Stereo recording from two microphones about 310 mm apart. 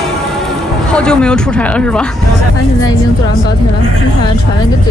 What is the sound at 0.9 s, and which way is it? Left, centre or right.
Speech, centre.